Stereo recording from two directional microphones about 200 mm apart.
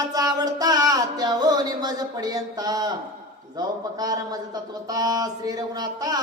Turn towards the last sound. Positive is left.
turn(degrees=-20)  # may be behind; listen again after turning